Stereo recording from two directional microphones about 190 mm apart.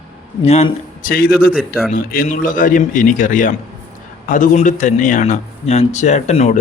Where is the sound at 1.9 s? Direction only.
45° left (ahead or behind).